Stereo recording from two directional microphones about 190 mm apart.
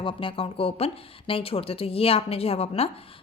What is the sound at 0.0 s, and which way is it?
A woman's voice, 25° left (ahead or behind).